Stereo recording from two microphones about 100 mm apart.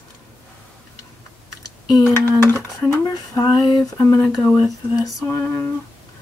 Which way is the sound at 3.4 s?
45° left (ahead or behind).